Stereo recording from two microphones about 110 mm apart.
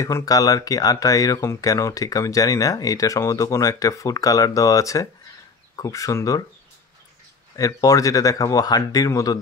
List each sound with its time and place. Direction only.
0.0 s speech: 30° left (ahead or behind)
7.5 s speech: 30° left (ahead or behind)